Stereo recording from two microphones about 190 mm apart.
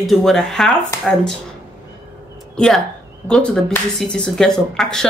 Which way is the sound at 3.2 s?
5° left (ahead or behind).